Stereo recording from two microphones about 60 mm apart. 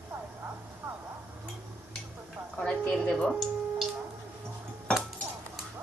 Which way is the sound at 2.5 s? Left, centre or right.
Centre.